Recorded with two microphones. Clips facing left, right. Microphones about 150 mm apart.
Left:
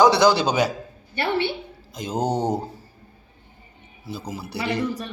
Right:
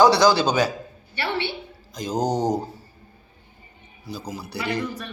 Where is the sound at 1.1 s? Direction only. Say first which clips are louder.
Left 4 dB; 50° left (ahead or behind).